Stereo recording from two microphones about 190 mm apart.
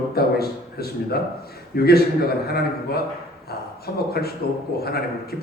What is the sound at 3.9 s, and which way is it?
Speech, 55° left (ahead or behind).